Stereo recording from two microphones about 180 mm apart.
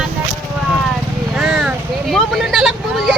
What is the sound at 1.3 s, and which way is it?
Speech, centre (ahead or behind).